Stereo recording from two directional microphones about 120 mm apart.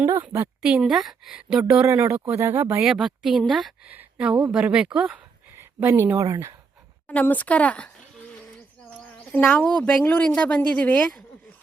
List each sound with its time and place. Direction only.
0.0 s a woman's voice: 20° right (ahead or behind)
0.6 s a woman's voice: 5° right (ahead or behind)
1.9 s speech: 25° right (ahead or behind)
2.8 s a woman's voice: 5° right (ahead or behind)
5.5 s speech: 20° right (ahead or behind)
7.1 s speech: 10° left (ahead or behind)
9.3 s speech: 15° left (ahead or behind)